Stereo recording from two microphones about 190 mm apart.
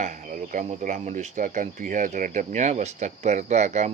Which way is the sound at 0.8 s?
40° right (ahead or behind).